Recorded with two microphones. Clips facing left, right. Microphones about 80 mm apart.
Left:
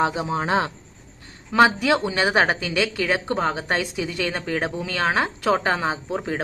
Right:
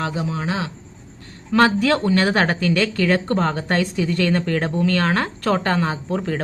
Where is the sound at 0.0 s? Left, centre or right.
Left.